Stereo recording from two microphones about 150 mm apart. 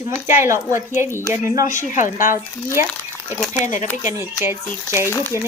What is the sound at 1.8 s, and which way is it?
Speech, 60° left (ahead or behind).